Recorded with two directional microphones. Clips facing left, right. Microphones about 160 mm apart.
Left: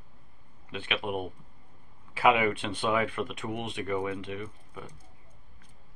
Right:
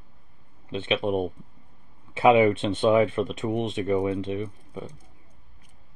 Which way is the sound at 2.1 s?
25° right (ahead or behind).